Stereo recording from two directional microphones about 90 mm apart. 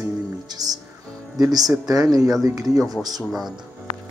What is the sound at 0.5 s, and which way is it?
Speech, 45° right (ahead or behind).